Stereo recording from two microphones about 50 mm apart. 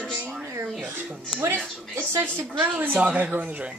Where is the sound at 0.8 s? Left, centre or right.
Right.